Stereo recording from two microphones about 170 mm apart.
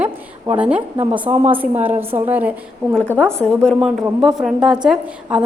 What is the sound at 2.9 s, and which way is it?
A woman's voice, 10° left (ahead or behind).